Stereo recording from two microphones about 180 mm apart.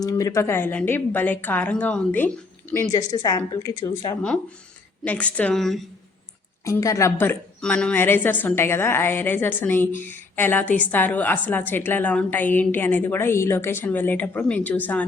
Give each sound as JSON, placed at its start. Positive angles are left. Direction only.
{"t": 0.0, "sound": "a woman's voice", "side_deg": 20}
{"t": 2.9, "sound": "a woman's voice", "side_deg": 20}
{"t": 5.0, "sound": "a woman's voice", "side_deg": 5}
{"t": 6.7, "sound": "a woman's voice", "side_deg": 20}